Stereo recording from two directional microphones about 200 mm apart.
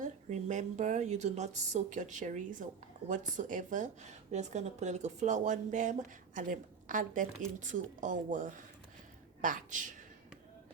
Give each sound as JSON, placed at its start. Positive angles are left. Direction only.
{"t": 0.0, "sound": "speech", "side_deg": -35}